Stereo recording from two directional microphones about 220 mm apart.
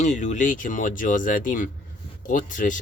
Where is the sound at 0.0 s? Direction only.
35° left (ahead or behind).